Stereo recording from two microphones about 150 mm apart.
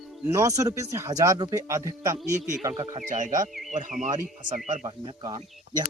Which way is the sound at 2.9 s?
55° right (ahead or behind).